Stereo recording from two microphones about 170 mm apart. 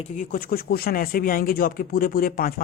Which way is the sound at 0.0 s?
50° left (ahead or behind).